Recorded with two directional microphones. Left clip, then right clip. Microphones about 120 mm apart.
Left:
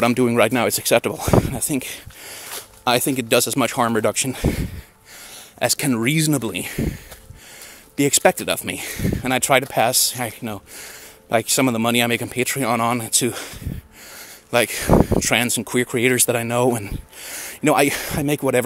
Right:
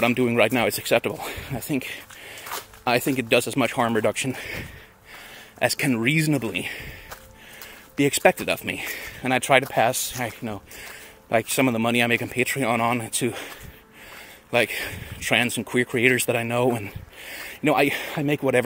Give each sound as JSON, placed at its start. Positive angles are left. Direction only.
{"t": 0.0, "sound": "speech", "side_deg": 40}
{"t": 6.4, "sound": "speech", "side_deg": 40}
{"t": 8.0, "sound": "speech", "side_deg": 35}